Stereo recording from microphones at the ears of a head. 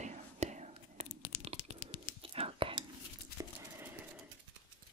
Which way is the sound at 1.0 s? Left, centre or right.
Left.